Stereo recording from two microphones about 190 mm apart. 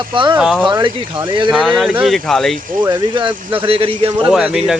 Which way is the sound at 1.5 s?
Centre (ahead or behind).